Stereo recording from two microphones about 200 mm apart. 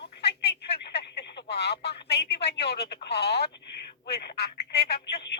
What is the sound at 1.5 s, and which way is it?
Speech, 55° left (ahead or behind).